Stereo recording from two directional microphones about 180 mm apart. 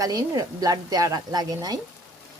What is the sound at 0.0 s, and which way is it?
Speech, 20° right (ahead or behind).